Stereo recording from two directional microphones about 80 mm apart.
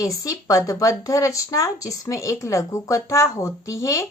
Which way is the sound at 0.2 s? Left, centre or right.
Left.